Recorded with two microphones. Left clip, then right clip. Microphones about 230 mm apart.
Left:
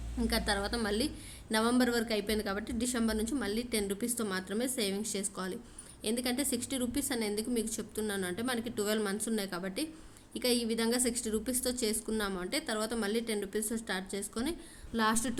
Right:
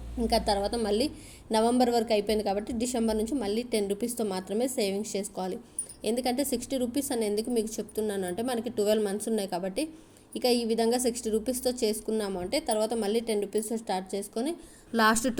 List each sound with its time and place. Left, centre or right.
0.3 s a woman's voice: centre
14.9 s a woman's voice: right